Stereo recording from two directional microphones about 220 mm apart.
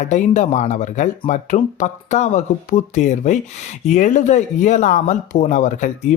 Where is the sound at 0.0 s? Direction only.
35° left (ahead or behind).